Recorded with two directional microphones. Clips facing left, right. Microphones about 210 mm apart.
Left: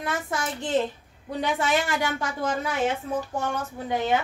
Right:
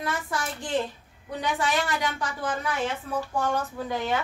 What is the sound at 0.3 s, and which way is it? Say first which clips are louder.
Speech: left 2 dB; 20° left (ahead or behind).